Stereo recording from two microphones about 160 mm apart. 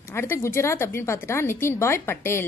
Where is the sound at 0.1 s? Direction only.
15° left (ahead or behind).